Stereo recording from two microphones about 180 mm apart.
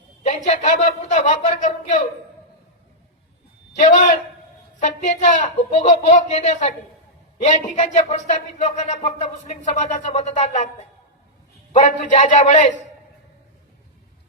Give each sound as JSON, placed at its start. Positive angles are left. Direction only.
{"t": 0.2, "sound": "a sound", "side_deg": 40}
{"t": 3.8, "sound": "speech", "side_deg": 45}
{"t": 11.7, "sound": "speech", "side_deg": 40}